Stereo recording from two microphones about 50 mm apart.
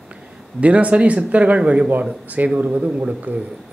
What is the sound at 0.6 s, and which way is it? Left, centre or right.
Speech, right.